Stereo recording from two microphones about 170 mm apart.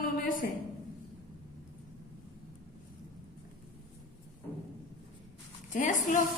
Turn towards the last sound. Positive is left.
turn(degrees=50)  # may be behind; listen again after turning